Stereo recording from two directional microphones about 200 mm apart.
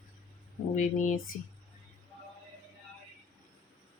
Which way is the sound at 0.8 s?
40° left (ahead or behind).